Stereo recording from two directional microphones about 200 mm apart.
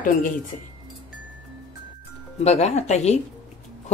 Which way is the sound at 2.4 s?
30° left (ahead or behind).